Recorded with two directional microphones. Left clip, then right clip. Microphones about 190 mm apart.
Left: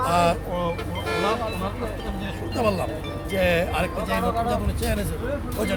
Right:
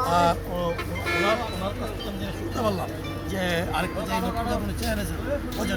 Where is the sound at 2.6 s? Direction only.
30° left (ahead or behind).